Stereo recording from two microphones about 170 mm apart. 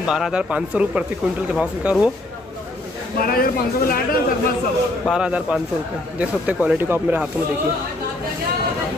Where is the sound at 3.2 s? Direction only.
60° left (ahead or behind).